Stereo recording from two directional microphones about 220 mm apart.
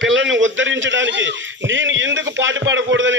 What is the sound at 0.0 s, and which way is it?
A man's voice, 55° right (ahead or behind).